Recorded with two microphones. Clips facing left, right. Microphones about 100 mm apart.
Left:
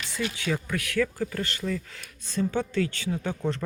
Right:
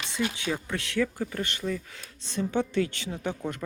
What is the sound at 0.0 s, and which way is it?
Speech, 20° right (ahead or behind).